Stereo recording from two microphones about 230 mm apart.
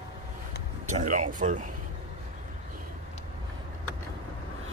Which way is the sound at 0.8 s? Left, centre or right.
Right.